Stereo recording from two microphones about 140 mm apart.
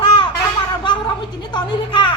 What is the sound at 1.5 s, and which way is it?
Speech, 30° left (ahead or behind).